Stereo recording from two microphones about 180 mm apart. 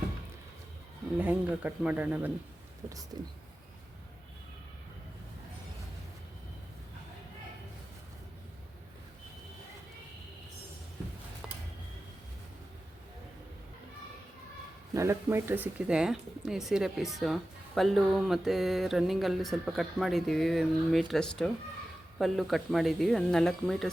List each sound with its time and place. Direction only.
1.2 s speech: 10° right (ahead or behind)
11.4 s a sound: 5° right (ahead or behind)
14.9 s speech: 15° right (ahead or behind); by 23.9 s centre (ahead or behind)